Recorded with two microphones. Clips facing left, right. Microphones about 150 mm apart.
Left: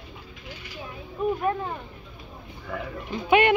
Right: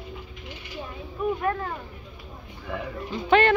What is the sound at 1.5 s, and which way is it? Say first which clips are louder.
Speech: left 1 dB; 15° left (ahead or behind).